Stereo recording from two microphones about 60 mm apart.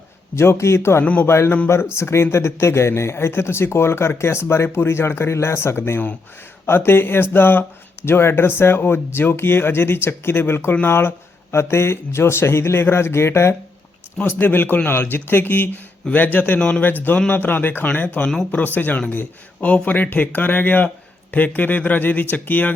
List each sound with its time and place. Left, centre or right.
0.3 s speech: left
1.0 s speech: left
1.3 s speech: left
14.3 s speech: left
16.6 s speech: centre
17.2 s speech: left